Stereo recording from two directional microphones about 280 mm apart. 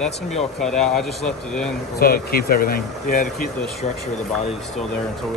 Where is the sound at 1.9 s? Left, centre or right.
Left.